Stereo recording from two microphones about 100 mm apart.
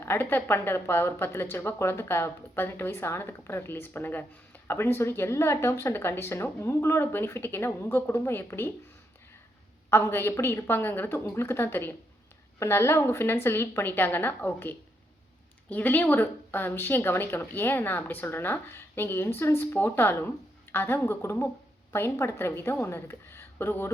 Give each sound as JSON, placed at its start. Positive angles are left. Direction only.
{"t": 0.0, "sound": "a woman's voice", "side_deg": 20}
{"t": 9.9, "sound": "a woman's voice", "side_deg": 25}